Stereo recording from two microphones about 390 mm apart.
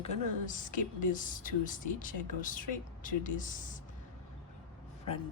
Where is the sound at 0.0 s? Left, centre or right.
Centre.